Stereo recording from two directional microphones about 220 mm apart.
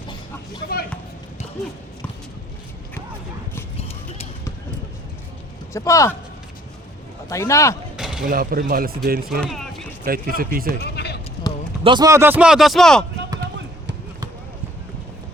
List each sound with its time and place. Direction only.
3.8 s a sound: 30° left (ahead or behind)
5.7 s a man's voice: 15° left (ahead or behind)
7.3 s a man's voice: 15° left (ahead or behind)
7.9 s mechanisms: centre (ahead or behind)
8.3 s speech: 40° right (ahead or behind)
9.4 s a sound: centre (ahead or behind)
10.1 s speech: 40° right (ahead or behind)
10.8 s a sound: 50° left (ahead or behind)
11.8 s speech: 20° right (ahead or behind); by 13.1 s centre (ahead or behind)
13.4 s basketball bounce: 55° right (ahead or behind)